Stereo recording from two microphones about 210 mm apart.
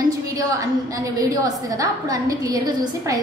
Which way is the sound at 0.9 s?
15° right (ahead or behind).